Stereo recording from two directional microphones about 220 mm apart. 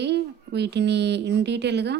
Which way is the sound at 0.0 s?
50° right (ahead or behind).